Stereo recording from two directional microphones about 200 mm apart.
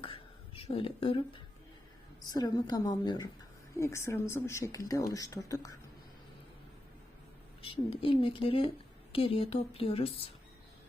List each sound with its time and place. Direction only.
0.0 s a sound: 25° left (ahead or behind)
2.3 s speech: 20° left (ahead or behind)
7.6 s speech: 25° left (ahead or behind)